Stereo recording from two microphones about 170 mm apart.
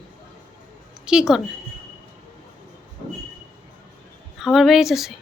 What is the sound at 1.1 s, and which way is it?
Speech, 5° right (ahead or behind).